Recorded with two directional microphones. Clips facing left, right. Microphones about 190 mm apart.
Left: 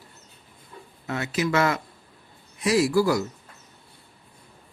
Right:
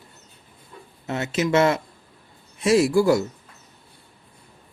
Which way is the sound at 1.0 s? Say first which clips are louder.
Right 3 dB; 25° right (ahead or behind).